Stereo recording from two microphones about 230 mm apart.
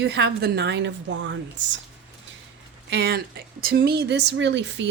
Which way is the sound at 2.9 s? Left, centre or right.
Right.